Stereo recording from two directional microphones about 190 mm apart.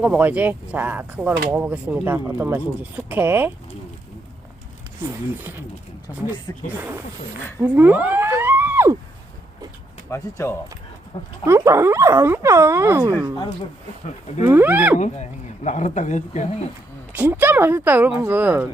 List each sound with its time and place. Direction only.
0.0 s speech: 5° right (ahead or behind)
5.4 s speech: 10° right (ahead or behind)
6.5 s speech: 20° left (ahead or behind)
7.6 s speech: 10° right (ahead or behind)
10.1 s speech: 15° left (ahead or behind)
11.4 s speech: 15° right (ahead or behind)
14.4 s speech: 10° right (ahead or behind)
14.9 s speech: 40° left (ahead or behind)
17.1 s speech: 10° right (ahead or behind)